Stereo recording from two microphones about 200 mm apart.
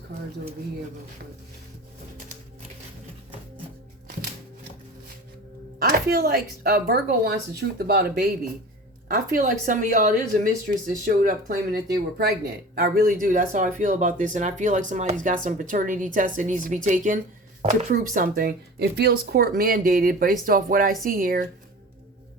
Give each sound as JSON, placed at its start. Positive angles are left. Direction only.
{"t": 5.8, "sound": "speech", "side_deg": -50}